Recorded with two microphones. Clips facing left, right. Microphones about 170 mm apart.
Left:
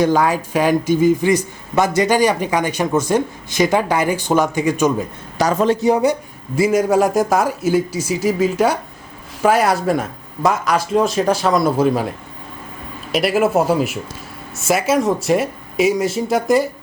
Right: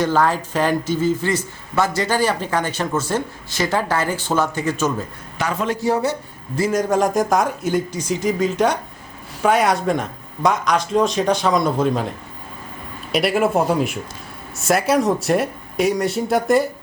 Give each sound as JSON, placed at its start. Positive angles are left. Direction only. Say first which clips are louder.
{"t": 0.0, "sound": "speech", "louder": "left 3 dB", "side_deg": 10}
{"t": 5.4, "sound": "a man's voice", "louder": "left 7 dB", "side_deg": 40}
{"t": 5.7, "sound": "speech", "louder": "left 5 dB", "side_deg": 15}